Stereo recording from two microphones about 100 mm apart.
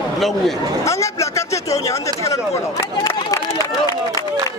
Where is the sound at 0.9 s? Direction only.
30° left (ahead or behind).